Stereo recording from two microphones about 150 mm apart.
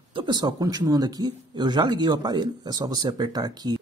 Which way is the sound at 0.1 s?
30° right (ahead or behind).